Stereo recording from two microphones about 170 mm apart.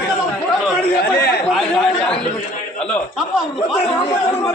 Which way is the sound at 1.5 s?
5° left (ahead or behind).